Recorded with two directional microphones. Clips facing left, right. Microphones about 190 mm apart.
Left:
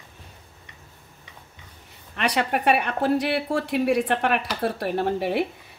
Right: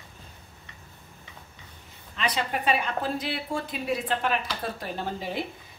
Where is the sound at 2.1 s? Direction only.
70° left (ahead or behind).